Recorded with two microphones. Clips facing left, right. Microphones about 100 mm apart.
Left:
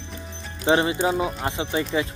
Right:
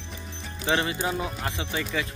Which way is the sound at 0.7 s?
25° left (ahead or behind).